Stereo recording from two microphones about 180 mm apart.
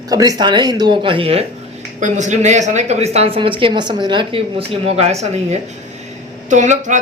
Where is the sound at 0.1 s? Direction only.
20° right (ahead or behind).